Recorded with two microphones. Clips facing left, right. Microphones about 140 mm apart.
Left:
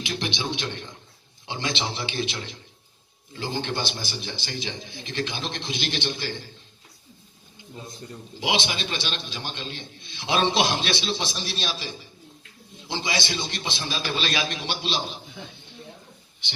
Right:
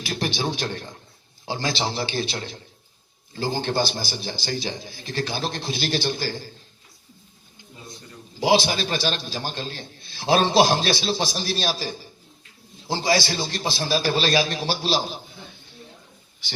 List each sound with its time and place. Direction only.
0.1 s a man's voice: 40° right (ahead or behind)
8.4 s a man's voice: 35° right (ahead or behind)